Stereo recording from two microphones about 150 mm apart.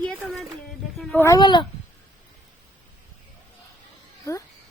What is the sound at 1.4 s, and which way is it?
Speech, 30° left (ahead or behind).